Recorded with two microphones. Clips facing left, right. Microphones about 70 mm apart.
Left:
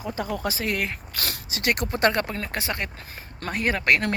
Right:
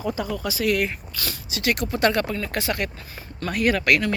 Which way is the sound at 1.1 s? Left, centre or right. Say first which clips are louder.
Even; left.